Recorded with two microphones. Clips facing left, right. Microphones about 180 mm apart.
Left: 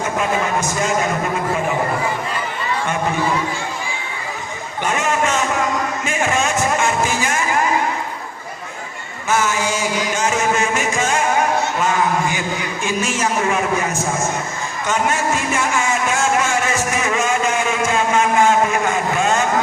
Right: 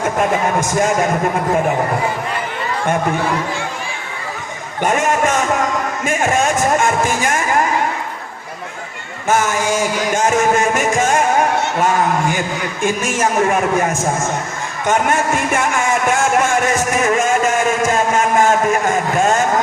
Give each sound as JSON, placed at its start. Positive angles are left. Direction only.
{"t": 4.8, "sound": "music", "side_deg": -50}
{"t": 9.2, "sound": "music", "side_deg": -50}
{"t": 12.8, "sound": "music", "side_deg": -50}
{"t": 14.8, "sound": "speech", "side_deg": -55}